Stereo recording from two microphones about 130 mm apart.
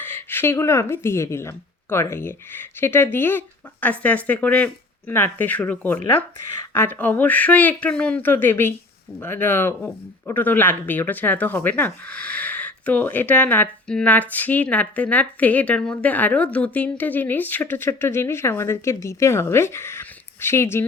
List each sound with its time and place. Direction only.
0.0 s speech: 15° left (ahead or behind)